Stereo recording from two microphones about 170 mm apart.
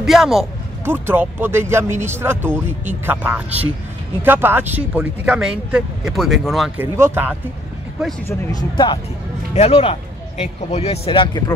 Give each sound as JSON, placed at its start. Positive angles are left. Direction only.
{"t": 0.0, "sound": "a man's voice", "side_deg": 0}
{"t": 0.8, "sound": "speech", "side_deg": -15}
{"t": 6.8, "sound": "speech", "side_deg": -15}
{"t": 8.3, "sound": "speech", "side_deg": 20}